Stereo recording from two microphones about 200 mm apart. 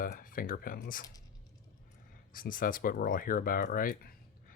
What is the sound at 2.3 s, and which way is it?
Speech, 45° left (ahead or behind).